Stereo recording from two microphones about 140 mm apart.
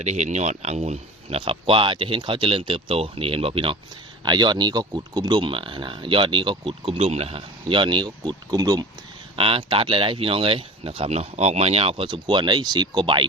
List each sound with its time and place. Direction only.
0.0 s speech: 55° right (ahead or behind); by 8.9 s 25° right (ahead or behind)
9.3 s speech: 40° right (ahead or behind)